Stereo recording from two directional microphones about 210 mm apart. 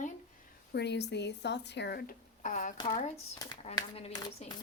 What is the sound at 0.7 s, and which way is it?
A woman's voice, 55° left (ahead or behind).